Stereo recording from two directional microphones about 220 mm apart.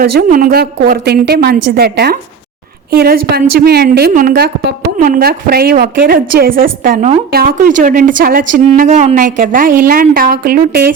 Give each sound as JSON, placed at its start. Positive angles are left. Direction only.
{"t": 0.0, "sound": "a woman's voice", "side_deg": -40}